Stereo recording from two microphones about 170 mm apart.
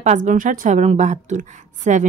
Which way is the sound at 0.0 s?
45° right (ahead or behind).